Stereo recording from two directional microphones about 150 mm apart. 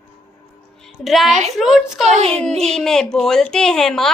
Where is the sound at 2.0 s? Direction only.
45° right (ahead or behind).